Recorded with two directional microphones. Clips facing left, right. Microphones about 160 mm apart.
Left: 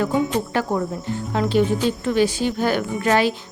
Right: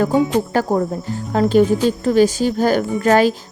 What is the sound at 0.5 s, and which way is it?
Speech, 40° right (ahead or behind).